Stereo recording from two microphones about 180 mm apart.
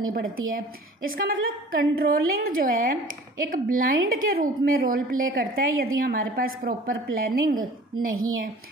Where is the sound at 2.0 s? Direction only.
55° right (ahead or behind).